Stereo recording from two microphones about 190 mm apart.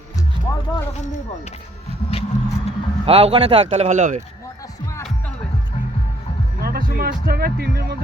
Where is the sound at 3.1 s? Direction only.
30° right (ahead or behind).